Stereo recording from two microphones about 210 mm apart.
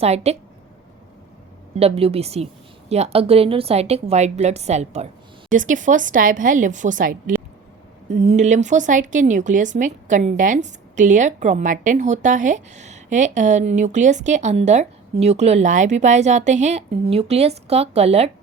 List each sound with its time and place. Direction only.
0.0 s speech: 30° right (ahead or behind)
1.8 s speech: 30° right (ahead or behind)